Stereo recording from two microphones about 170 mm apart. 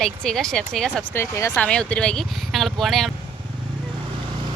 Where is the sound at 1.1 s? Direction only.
15° left (ahead or behind); by 3.1 s centre (ahead or behind).